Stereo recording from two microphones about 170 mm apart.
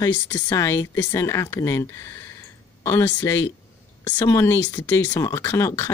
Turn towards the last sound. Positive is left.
turn(degrees=15)  # may be behind; listen again after turning